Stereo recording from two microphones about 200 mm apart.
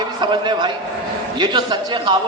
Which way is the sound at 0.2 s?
20° right (ahead or behind).